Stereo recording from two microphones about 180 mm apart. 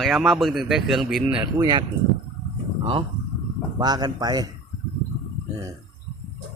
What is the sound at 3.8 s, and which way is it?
Speech, 20° right (ahead or behind).